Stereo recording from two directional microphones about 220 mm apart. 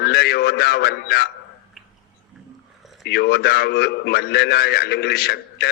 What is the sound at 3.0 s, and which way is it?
A man's voice, 50° left (ahead or behind).